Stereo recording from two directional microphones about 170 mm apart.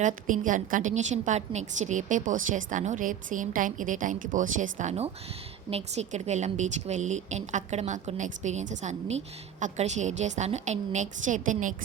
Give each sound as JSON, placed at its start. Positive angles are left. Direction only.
{"t": 0.0, "sound": "a woman's voice", "side_deg": -50}